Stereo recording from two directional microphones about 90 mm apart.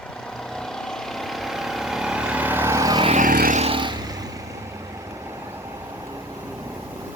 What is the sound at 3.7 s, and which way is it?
Vehicle, 60° right (ahead or behind).